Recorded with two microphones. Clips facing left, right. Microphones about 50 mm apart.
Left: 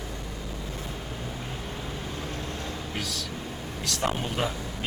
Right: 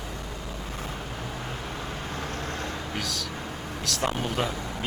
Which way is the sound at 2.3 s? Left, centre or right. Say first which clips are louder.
Right 2 dB; right.